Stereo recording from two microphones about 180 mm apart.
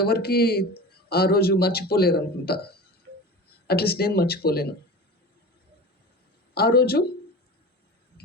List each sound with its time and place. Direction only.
0.0 s a man's voice: 60° left (ahead or behind)
6.5 s speech: 60° left (ahead or behind)